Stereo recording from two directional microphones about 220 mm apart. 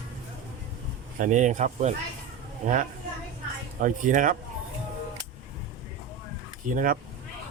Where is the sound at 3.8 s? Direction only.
35° right (ahead or behind).